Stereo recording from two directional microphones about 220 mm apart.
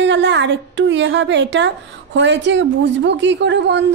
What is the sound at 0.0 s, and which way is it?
A woman's voice, 55° right (ahead or behind).